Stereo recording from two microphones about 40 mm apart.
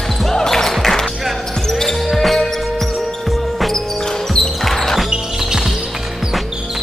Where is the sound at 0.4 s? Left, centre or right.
Centre.